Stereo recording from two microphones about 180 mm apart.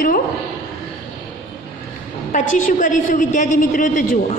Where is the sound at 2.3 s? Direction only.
45° left (ahead or behind).